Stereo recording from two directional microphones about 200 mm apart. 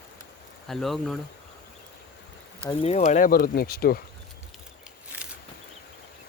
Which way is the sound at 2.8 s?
35° left (ahead or behind).